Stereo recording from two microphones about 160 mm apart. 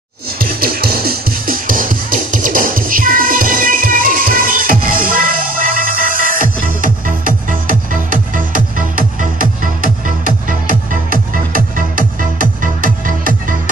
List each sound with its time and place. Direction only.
0.4 s music: 70° right (ahead or behind)